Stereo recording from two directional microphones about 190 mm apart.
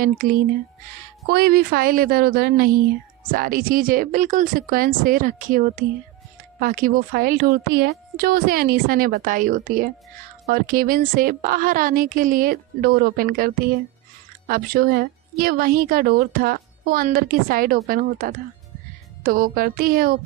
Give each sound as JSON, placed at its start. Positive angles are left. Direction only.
{"t": 0.0, "sound": "a woman's voice", "side_deg": -45}